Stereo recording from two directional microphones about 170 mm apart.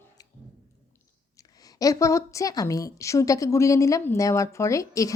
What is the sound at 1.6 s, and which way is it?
A woman's voice, 20° left (ahead or behind).